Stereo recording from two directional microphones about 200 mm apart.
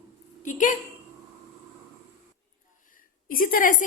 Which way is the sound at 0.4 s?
40° left (ahead or behind).